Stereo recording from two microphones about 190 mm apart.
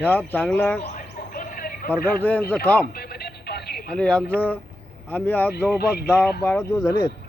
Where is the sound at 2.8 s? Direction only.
55° left (ahead or behind).